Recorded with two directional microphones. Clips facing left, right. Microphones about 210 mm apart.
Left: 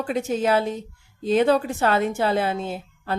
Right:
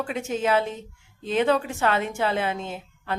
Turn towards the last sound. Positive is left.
turn(degrees=35)  # may be behind; listen again after turning